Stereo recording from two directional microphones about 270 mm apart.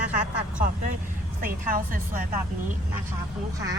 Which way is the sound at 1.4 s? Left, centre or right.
Right.